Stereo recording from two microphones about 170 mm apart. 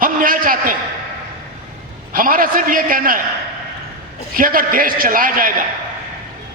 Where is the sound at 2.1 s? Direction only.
55° right (ahead or behind).